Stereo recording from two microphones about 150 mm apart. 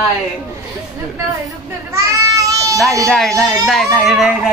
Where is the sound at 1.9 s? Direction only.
20° right (ahead or behind).